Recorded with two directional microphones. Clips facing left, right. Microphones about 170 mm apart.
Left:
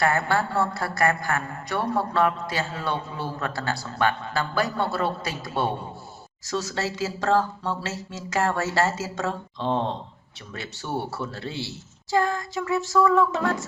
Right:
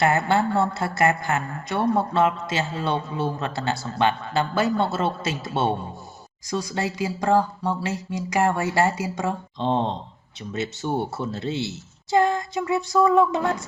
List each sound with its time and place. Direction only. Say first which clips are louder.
0.0 s speech: right 3 dB; 20° right (ahead or behind)
6.5 s a sound: right 1 dB; 15° right (ahead or behind)
10.5 s speech: right 5 dB; 20° right (ahead or behind)